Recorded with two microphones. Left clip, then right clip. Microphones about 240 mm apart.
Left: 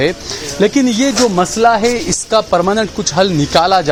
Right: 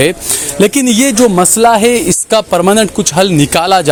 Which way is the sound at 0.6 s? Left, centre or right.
Right.